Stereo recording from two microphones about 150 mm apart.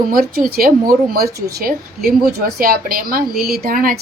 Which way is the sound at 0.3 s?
90° right.